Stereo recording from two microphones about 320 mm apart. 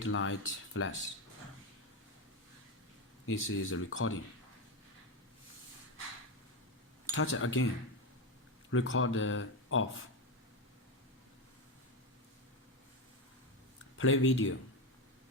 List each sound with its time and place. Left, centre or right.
0.0 s speech: left
3.2 s speech: left
7.1 s speech: left
8.7 s speech: left
14.0 s speech: left